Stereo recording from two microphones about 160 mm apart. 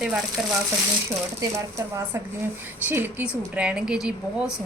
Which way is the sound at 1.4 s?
20° right (ahead or behind).